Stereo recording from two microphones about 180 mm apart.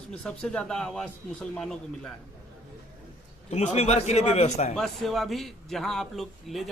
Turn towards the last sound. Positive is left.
turn(degrees=0)  # may be behind; listen again after turning